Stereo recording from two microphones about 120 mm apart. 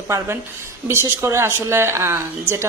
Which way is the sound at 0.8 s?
20° right (ahead or behind).